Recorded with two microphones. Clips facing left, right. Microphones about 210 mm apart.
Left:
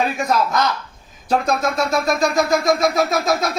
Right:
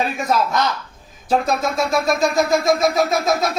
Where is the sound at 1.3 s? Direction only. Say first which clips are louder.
Even; centre (ahead or behind).